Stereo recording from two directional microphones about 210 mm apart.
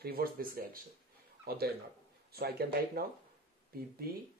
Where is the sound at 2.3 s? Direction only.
50° right (ahead or behind).